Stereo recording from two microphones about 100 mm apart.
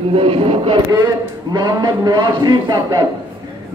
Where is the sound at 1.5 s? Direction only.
45° right (ahead or behind).